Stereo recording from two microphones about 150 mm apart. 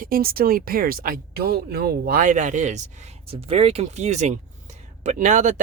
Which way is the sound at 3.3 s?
40° right (ahead or behind).